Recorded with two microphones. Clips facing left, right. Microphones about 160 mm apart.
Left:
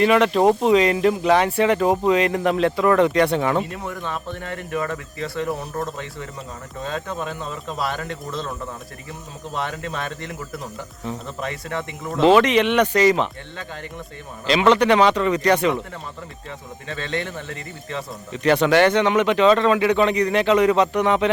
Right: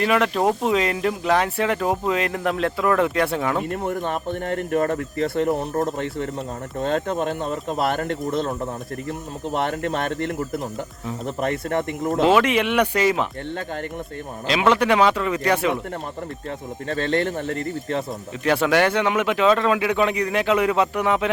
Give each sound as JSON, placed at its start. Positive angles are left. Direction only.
{"t": 0.0, "sound": "speech", "side_deg": 0}
{"t": 3.7, "sound": "speech", "side_deg": -50}
{"t": 9.5, "sound": "speech", "side_deg": -55}
{"t": 12.2, "sound": "speech", "side_deg": -5}
{"t": 14.4, "sound": "speech", "side_deg": -5}
{"t": 16.9, "sound": "speech", "side_deg": -45}
{"t": 18.4, "sound": "speech", "side_deg": -5}